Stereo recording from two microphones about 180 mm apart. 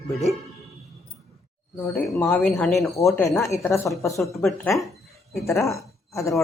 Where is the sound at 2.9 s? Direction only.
15° left (ahead or behind).